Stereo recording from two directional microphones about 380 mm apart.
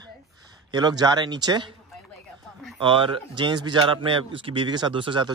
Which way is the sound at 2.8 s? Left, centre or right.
Centre.